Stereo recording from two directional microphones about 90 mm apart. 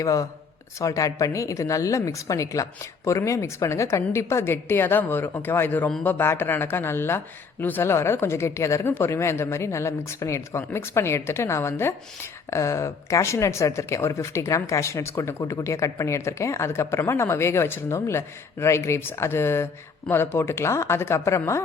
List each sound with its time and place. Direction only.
0.0 s speech: 40° left (ahead or behind)